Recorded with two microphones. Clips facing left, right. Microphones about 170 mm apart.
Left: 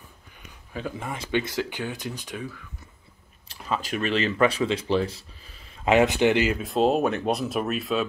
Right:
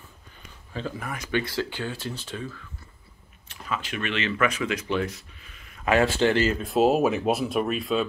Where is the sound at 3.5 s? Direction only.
35° left (ahead or behind); by 6.6 s 15° left (ahead or behind).